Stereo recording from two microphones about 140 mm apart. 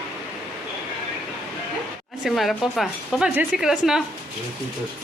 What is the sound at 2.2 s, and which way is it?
Speech, centre (ahead or behind).